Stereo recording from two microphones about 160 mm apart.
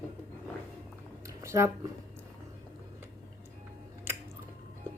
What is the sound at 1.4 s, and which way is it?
Speech, 15° right (ahead or behind).